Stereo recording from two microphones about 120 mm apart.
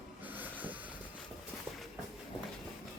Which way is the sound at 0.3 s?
15° right (ahead or behind).